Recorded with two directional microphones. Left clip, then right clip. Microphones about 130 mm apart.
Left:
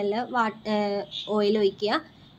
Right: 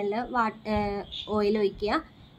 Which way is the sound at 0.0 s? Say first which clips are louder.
Left 2 dB; 20° left (ahead or behind).